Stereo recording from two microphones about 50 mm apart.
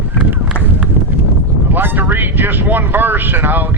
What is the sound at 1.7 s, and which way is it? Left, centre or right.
Vehicle, right.